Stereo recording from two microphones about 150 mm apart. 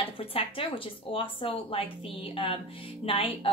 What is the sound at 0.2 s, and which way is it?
A woman's voice, 40° left (ahead or behind).